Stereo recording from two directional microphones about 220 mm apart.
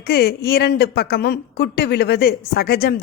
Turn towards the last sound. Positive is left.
turn(degrees=45)  # may be behind; listen again after turning